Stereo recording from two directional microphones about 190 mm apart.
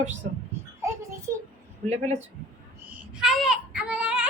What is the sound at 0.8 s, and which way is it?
Child singing, 15° right (ahead or behind).